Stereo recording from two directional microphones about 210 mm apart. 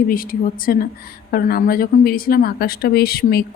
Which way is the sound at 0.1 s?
40° left (ahead or behind).